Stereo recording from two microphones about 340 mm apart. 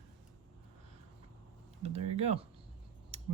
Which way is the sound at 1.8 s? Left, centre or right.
Centre.